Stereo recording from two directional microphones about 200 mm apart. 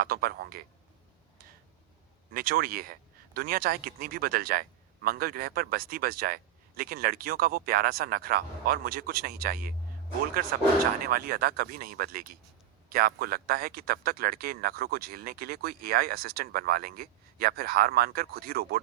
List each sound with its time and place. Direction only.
0.0 s speech: 50° right (ahead or behind)
2.3 s speech: 45° right (ahead or behind)
11.0 s speech: 50° right (ahead or behind)